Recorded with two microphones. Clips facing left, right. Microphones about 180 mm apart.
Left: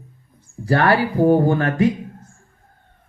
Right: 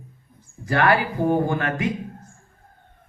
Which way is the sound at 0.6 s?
35° left (ahead or behind).